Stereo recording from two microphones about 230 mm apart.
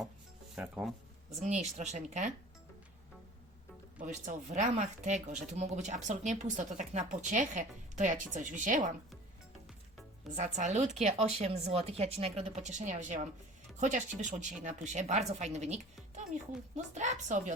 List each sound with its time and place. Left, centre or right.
0.5 s speech: centre
1.5 s speech: right
4.0 s speech: right
10.3 s speech: right